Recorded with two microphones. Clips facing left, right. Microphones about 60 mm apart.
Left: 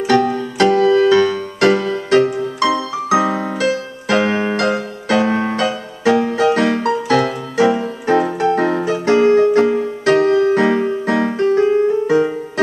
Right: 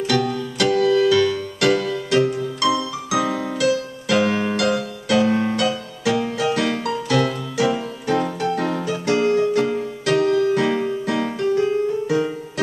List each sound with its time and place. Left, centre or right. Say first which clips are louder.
0.0 s music: left 6 dB; left